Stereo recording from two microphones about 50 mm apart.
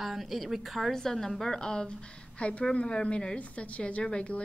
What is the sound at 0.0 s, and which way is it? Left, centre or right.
Speech, centre.